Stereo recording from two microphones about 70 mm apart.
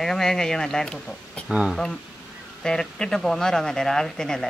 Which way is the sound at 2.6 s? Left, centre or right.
Centre.